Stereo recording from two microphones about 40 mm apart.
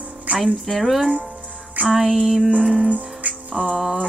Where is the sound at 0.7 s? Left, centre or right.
Centre.